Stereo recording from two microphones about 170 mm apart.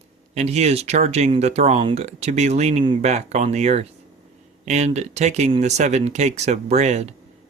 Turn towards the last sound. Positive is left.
turn(degrees=-40)  # may be behind; listen again after turning